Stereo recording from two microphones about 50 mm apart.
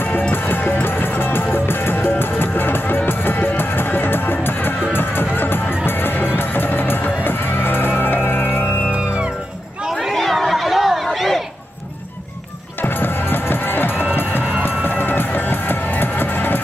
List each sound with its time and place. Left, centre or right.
0.3 s music: left
8.8 s music: right
9.9 s chatter: centre
11.1 s crowd: centre
12.8 s music: left